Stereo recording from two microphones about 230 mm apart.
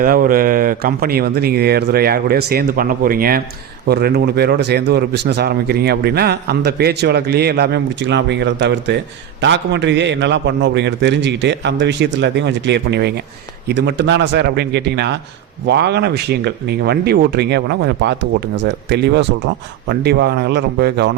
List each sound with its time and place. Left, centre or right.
0.0 s speech: right